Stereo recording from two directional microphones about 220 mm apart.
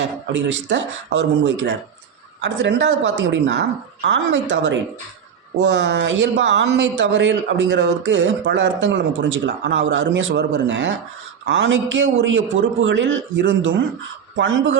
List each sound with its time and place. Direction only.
0.3 s speech: 55° right (ahead or behind)